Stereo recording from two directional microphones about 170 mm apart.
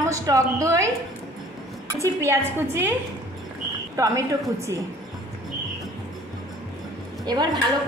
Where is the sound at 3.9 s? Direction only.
20° right (ahead or behind).